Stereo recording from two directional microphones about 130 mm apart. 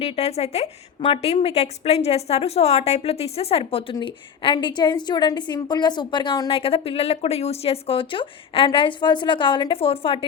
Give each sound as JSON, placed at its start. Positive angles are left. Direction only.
{"t": 0.0, "sound": "a woman's voice", "side_deg": 55}
{"t": 6.5, "sound": "a woman's voice", "side_deg": 50}